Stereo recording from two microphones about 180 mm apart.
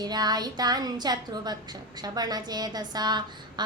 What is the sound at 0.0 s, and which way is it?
A woman's voice, 20° right (ahead or behind).